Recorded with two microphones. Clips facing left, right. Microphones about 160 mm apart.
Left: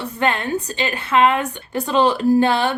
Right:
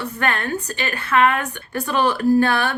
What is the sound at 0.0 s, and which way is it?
A woman's voice, 20° left (ahead or behind).